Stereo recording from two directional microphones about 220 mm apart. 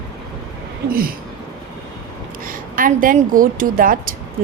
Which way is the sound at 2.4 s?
40° right (ahead or behind).